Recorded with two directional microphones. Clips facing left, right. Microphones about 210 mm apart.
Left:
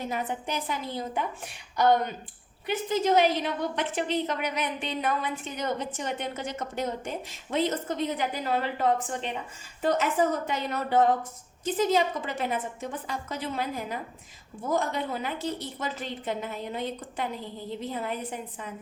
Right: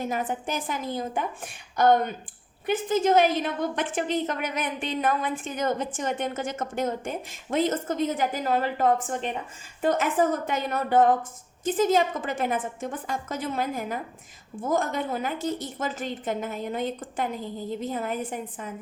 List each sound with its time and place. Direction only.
0.0 s a woman's voice: 45° right (ahead or behind)